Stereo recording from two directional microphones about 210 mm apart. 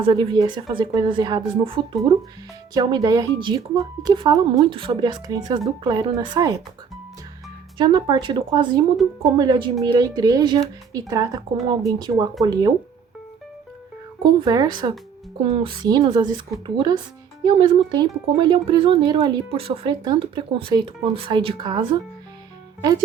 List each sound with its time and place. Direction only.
0.0 s speech: 20° right (ahead or behind)
7.8 s speech: 20° right (ahead or behind)
9.0 s speech: centre (ahead or behind)
9.4 s speech: 20° right (ahead or behind)
14.2 s speech: 20° right (ahead or behind)